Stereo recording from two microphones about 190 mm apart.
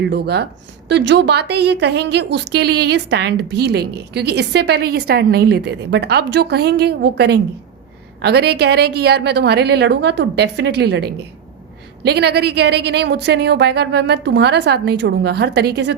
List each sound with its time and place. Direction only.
0.1 s a woman's voice: 60° right (ahead or behind)